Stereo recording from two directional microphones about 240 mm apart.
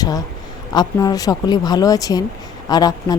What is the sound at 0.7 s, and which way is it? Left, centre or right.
Speech, centre.